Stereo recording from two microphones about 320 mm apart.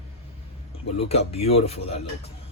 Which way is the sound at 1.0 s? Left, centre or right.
Centre.